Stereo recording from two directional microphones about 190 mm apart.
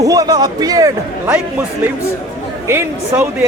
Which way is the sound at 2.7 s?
10° right (ahead or behind).